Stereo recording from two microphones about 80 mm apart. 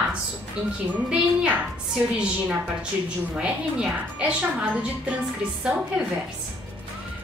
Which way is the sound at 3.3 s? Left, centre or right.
Centre.